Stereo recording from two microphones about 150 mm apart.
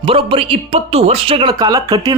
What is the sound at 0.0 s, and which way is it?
Speech, 35° right (ahead or behind).